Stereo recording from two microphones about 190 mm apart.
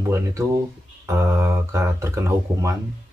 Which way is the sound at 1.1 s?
15° right (ahead or behind).